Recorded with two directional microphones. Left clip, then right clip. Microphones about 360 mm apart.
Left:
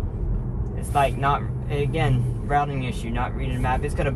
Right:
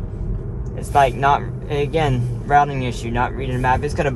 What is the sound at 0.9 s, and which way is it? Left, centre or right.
A man's voice, right.